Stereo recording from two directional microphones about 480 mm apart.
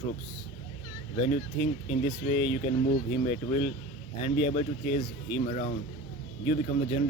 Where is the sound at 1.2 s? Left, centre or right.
Centre.